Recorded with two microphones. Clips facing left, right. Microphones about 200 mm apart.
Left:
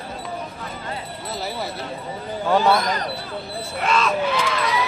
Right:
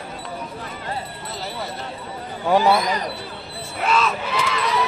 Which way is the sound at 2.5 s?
10° right (ahead or behind).